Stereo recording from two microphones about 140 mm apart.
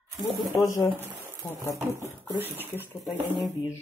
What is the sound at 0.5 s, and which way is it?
Speech, 20° left (ahead or behind).